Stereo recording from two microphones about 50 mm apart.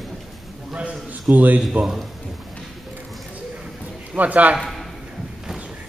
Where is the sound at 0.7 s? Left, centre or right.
Right.